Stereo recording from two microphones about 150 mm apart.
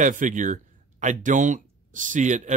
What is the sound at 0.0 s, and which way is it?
Speech, 60° right (ahead or behind).